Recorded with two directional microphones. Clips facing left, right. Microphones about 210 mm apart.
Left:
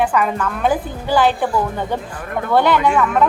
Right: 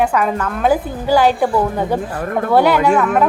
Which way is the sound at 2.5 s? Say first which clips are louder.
Right 2 dB; 10° right (ahead or behind).